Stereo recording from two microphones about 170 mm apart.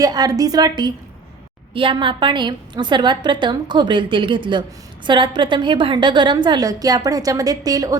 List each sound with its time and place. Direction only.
0.0 s a woman's voice: 20° right (ahead or behind)